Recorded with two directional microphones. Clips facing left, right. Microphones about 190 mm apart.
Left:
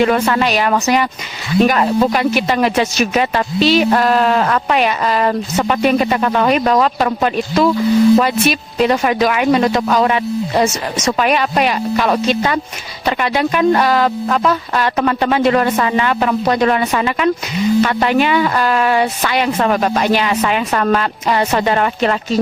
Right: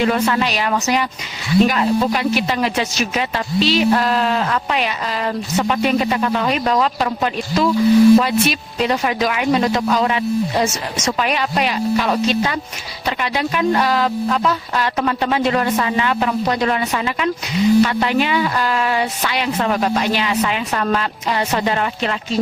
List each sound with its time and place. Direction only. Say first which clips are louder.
0.0 s speech: left 3 dB; 60° left (ahead or behind)